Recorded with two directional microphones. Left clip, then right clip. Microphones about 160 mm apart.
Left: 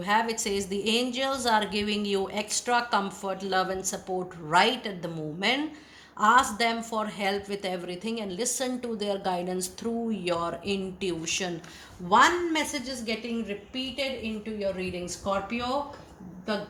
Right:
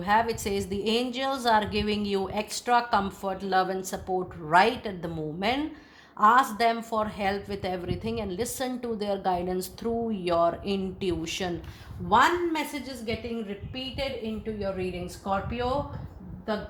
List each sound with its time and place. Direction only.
0.0 s a woman's voice: 40° right (ahead or behind)
14.6 s a woman's voice: 45° right (ahead or behind)